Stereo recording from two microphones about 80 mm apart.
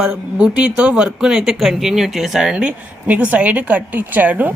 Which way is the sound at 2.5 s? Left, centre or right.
Centre.